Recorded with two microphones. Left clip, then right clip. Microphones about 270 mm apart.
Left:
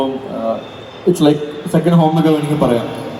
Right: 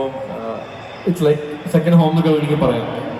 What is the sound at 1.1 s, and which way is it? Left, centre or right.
Speech, left.